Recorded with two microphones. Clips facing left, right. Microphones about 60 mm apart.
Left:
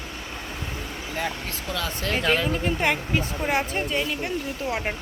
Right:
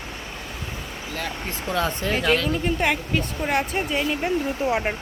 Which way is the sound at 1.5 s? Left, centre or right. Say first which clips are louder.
Right 5 dB; right.